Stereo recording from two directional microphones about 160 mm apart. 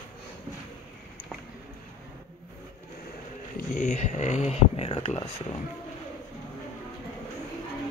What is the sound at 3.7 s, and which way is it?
Speech, 50° left (ahead or behind).